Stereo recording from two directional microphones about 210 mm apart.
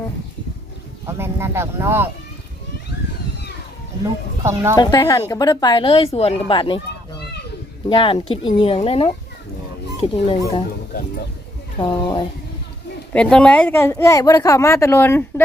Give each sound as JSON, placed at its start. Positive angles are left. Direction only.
{"t": 1.0, "sound": "speech", "side_deg": -10}
{"t": 4.8, "sound": "speech", "side_deg": 20}
{"t": 7.9, "sound": "speech", "side_deg": 25}
{"t": 11.8, "sound": "speech", "side_deg": 20}
{"t": 13.1, "sound": "a woman's voice", "side_deg": 5}